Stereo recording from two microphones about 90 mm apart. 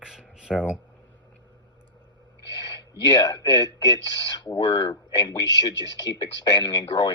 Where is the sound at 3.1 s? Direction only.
50° left (ahead or behind).